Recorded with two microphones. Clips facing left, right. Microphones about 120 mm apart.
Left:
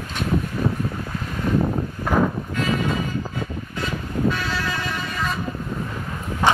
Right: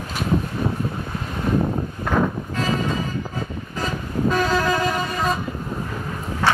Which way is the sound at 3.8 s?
40° right (ahead or behind).